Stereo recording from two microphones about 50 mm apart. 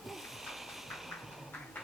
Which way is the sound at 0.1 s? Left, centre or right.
Centre.